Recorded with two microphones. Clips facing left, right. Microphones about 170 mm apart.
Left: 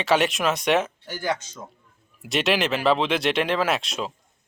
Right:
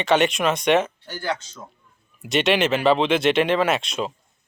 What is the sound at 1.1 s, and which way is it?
Speech, 15° left (ahead or behind).